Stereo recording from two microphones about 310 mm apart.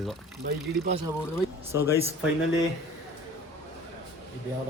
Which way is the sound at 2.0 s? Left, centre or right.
Centre.